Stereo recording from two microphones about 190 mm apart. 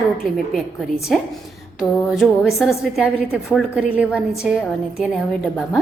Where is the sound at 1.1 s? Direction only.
5° left (ahead or behind).